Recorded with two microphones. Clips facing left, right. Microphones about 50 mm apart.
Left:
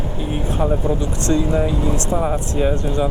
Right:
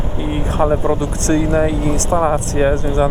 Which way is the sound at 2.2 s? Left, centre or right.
Right.